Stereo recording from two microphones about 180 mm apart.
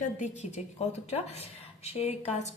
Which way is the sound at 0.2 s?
35° left (ahead or behind).